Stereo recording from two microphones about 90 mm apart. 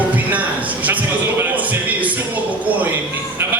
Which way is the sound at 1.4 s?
15° right (ahead or behind).